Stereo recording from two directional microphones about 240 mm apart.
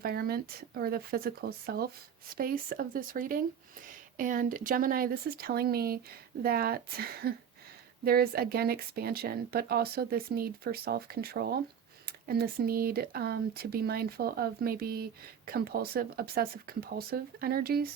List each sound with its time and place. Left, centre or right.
0.0 s speech: right